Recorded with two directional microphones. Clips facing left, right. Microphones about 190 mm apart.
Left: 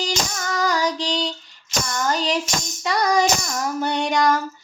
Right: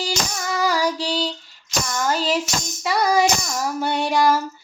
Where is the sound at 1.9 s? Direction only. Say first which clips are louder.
Right 1 dB; 5° right (ahead or behind).